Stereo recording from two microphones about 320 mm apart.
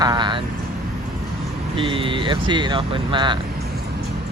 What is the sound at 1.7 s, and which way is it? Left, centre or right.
Speech, centre.